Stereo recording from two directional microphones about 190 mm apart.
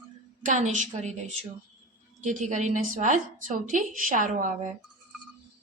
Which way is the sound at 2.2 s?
40° right (ahead or behind).